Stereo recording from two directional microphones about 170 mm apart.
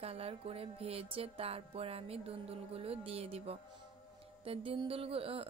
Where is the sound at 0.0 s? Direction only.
35° right (ahead or behind).